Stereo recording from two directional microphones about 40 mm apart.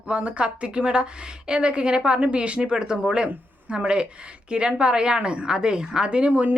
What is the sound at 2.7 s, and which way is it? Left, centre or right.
A woman's voice, centre.